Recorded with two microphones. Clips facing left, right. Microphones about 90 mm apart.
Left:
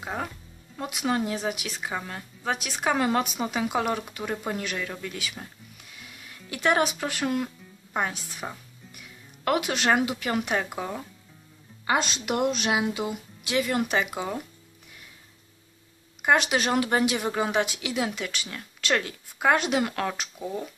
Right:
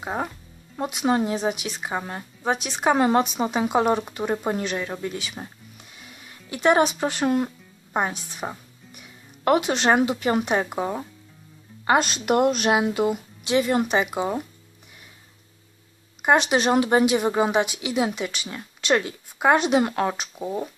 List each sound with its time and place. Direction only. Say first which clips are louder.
0.0 s speech: right 4 dB; 25° right (ahead or behind)
6.5 s a woman's voice: right 5 dB; 25° right (ahead or behind)
11.8 s speech: right 5 dB; 50° right (ahead or behind)
13.4 s speech: right 4 dB; 25° right (ahead or behind)
16.2 s speech: right 3 dB; 25° right (ahead or behind)